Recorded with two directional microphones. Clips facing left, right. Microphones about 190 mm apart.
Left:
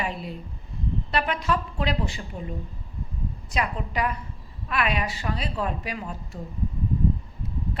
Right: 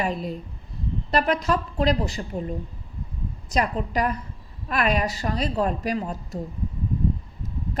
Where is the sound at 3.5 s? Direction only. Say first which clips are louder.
Right 5 dB; 40° right (ahead or behind).